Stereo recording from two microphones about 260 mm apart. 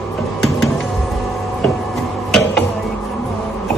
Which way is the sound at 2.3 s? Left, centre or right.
Centre.